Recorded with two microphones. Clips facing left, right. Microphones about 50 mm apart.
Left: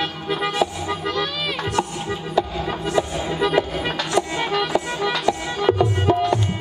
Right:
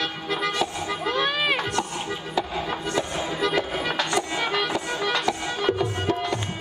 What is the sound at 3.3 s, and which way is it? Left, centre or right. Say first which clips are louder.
Music: left 5 dB; centre.